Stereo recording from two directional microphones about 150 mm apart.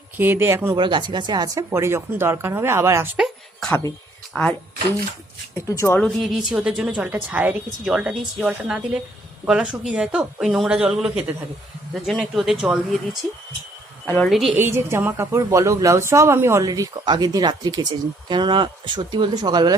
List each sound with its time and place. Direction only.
0.2 s speech: 15° right (ahead or behind)
0.8 s a woman's voice: 30° right (ahead or behind)
3.2 s a sound: centre (ahead or behind)
4.3 s speech: 10° left (ahead or behind)
5.5 s speech: 20° left (ahead or behind)
6.0 s a woman's voice: centre (ahead or behind)
14.3 s a woman's voice: centre (ahead or behind)
14.5 s a woman's voice: 15° right (ahead or behind)